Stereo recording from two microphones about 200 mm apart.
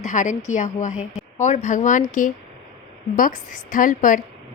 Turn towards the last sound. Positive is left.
turn(degrees=40)  # may be behind; listen again after turning